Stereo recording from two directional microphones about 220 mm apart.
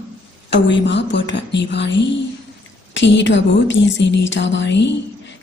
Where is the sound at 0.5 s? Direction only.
55° left (ahead or behind).